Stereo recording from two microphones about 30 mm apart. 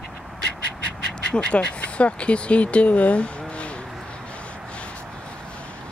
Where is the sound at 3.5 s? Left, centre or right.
Left.